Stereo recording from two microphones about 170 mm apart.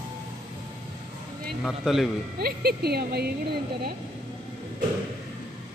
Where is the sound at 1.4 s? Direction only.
Centre (ahead or behind).